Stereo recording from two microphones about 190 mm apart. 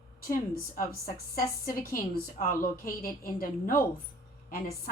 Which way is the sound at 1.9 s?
50° left (ahead or behind).